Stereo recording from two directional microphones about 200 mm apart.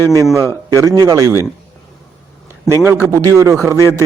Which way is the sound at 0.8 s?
15° right (ahead or behind).